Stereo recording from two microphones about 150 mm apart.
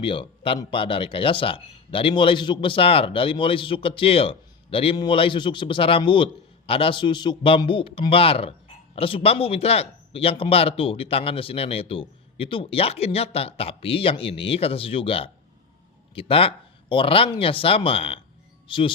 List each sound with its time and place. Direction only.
0.0 s speech: 35° left (ahead or behind)